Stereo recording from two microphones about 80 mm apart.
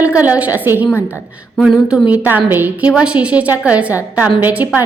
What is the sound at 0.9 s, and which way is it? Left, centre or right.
Speech, left.